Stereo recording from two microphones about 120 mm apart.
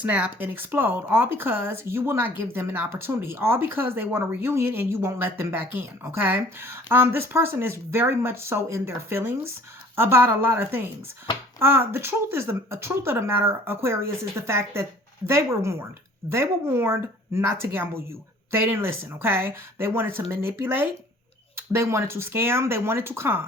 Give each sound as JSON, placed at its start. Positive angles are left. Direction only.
{"t": 0.0, "sound": "speech", "side_deg": -15}